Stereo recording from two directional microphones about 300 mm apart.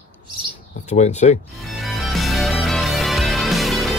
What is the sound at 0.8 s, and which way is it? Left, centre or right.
Speech, left.